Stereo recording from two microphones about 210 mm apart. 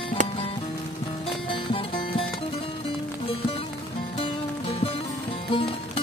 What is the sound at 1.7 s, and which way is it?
Music, 25° left (ahead or behind).